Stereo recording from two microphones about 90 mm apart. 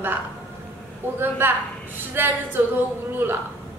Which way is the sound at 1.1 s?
25° right (ahead or behind).